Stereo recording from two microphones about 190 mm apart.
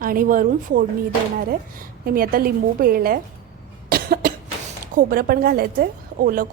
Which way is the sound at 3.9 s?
50° right (ahead or behind).